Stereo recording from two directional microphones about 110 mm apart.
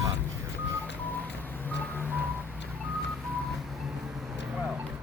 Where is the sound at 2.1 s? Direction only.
15° right (ahead or behind).